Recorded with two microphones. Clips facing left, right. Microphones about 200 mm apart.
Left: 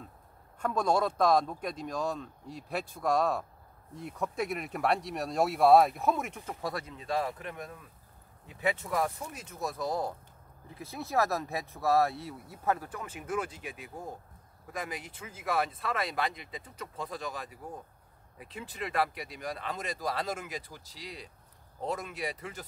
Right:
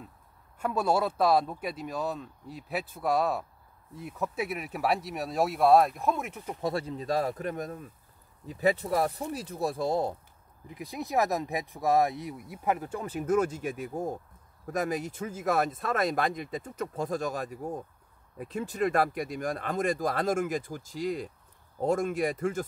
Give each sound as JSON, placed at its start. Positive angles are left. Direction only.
{"t": 0.6, "sound": "speech", "side_deg": -5}
{"t": 6.4, "sound": "speech", "side_deg": -25}
{"t": 10.7, "sound": "speech", "side_deg": -15}
{"t": 13.0, "sound": "speech", "side_deg": -40}